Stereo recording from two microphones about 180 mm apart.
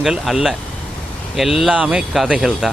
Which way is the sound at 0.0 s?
Centre (ahead or behind).